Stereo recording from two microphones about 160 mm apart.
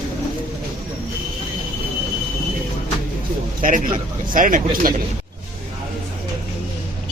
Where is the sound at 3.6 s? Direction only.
60° right (ahead or behind).